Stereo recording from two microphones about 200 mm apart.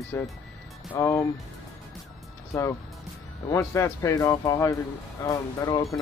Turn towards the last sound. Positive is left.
turn(degrees=20)  # may be behind; listen again after turning